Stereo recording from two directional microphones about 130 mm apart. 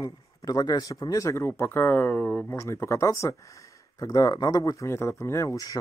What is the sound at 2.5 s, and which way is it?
Speech, 20° left (ahead or behind).